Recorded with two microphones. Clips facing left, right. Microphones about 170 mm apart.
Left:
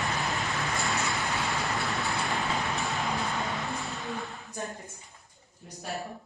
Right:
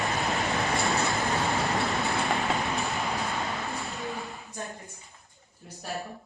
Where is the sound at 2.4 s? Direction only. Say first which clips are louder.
Right 2 dB; centre (ahead or behind).